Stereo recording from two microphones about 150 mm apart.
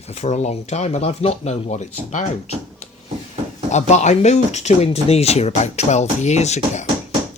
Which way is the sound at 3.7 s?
50° left (ahead or behind).